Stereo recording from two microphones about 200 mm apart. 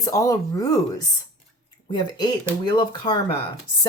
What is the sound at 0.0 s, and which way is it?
Speech, 15° left (ahead or behind).